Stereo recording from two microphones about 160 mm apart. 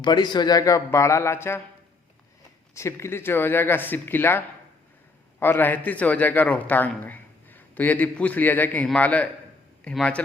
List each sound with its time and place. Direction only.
0.0 s a man's voice: 25° left (ahead or behind)
2.7 s a man's voice: 15° left (ahead or behind)